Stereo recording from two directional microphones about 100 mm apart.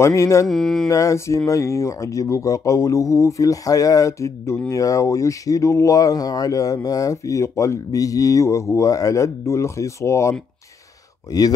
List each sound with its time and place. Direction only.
0.0 s mantra: 30° left (ahead or behind)
0.5 s mantra: 5° left (ahead or behind)
0.8 s speech: 30° left (ahead or behind)